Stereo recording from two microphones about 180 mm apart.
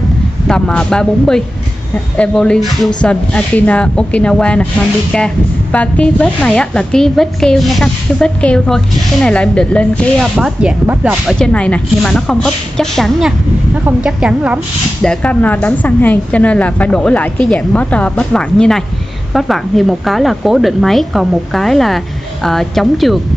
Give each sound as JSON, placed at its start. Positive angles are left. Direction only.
{"t": 0.5, "sound": "a woman's voice", "side_deg": 5}
{"t": 10.3, "sound": "a woman's voice", "side_deg": -5}
{"t": 11.3, "sound": "a woman's voice", "side_deg": 5}
{"t": 15.0, "sound": "a woman's voice", "side_deg": 5}